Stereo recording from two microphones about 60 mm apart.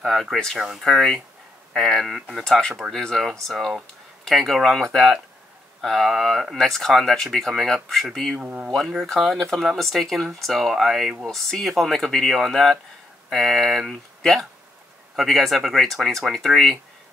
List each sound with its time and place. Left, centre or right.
0.0 s speech: centre
0.8 s speech: centre
8.4 s speech: right
8.6 s speech: centre